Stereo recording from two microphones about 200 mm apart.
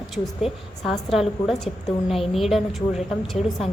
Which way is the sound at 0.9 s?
Centre (ahead or behind).